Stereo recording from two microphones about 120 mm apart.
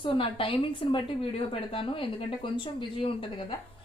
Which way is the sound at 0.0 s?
45° left (ahead or behind).